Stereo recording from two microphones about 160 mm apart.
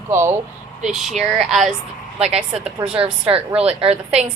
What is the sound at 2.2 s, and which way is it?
A woman's voice, 40° right (ahead or behind).